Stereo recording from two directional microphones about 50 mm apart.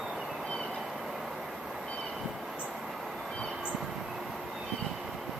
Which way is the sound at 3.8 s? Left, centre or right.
Centre.